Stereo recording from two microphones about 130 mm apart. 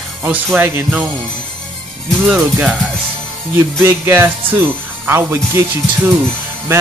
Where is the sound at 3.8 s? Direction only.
20° right (ahead or behind).